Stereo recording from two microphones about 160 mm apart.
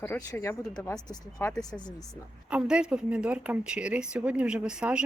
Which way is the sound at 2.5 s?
5° right (ahead or behind).